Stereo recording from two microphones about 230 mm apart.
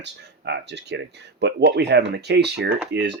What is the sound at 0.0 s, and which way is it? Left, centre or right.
Speech, right.